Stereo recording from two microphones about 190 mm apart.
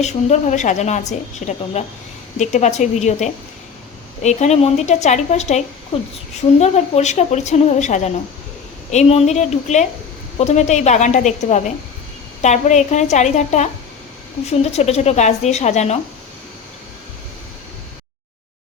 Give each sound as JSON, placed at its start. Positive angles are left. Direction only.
{"t": 0.0, "sound": "a woman's voice", "side_deg": 35}